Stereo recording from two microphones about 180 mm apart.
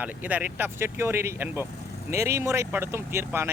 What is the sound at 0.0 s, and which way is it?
Speech, 10° right (ahead or behind).